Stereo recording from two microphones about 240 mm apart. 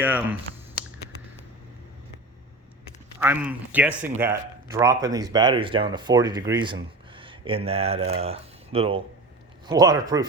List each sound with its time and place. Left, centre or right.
0.0 s speech: centre
3.2 s speech: centre